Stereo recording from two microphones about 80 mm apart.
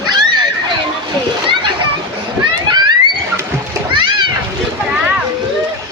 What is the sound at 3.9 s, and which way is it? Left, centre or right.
Splash, right.